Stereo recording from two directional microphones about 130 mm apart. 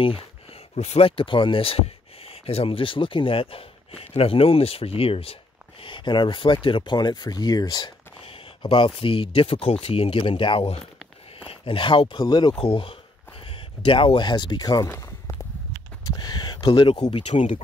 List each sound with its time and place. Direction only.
0.0 s speech: 45° left (ahead or behind)